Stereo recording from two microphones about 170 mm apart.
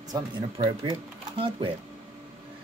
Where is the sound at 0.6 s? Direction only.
35° right (ahead or behind).